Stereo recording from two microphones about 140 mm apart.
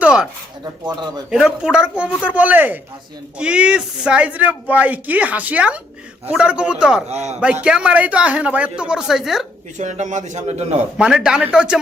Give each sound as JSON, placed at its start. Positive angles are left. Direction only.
{"t": 0.0, "sound": "a sound", "side_deg": -5}
{"t": 1.3, "sound": "speech", "side_deg": -5}
{"t": 7.1, "sound": "a man's voice", "side_deg": -50}
{"t": 7.4, "sound": "speech", "side_deg": -5}
{"t": 9.7, "sound": "a man's voice", "side_deg": -60}
{"t": 10.9, "sound": "speech", "side_deg": -5}